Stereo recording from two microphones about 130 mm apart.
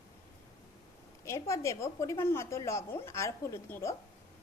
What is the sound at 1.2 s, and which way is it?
A woman's voice, 25° left (ahead or behind).